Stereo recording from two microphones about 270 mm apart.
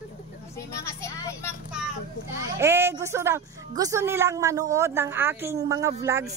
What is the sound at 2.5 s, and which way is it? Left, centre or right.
A woman's voice, centre.